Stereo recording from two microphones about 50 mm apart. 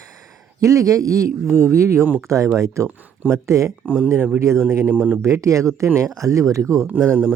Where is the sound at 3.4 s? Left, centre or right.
Right.